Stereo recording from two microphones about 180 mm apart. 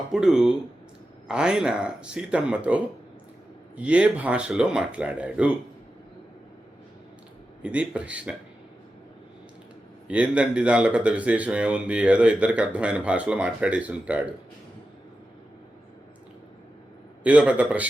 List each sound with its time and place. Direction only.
0.1 s speech: centre (ahead or behind)
7.6 s speech: 5° right (ahead or behind)
10.1 s speech: 5° right (ahead or behind)
17.2 s speech: 10° right (ahead or behind)